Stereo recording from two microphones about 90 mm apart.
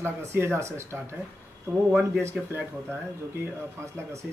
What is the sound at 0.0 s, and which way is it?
Speech, 30° right (ahead or behind).